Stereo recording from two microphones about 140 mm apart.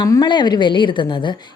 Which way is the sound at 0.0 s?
30° left (ahead or behind).